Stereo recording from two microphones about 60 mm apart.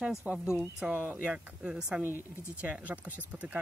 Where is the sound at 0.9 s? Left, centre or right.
Right; by 2.0 s centre.